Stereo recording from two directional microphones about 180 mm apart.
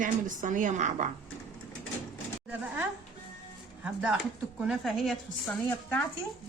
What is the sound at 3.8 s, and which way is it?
A woman's voice, 5° right (ahead or behind).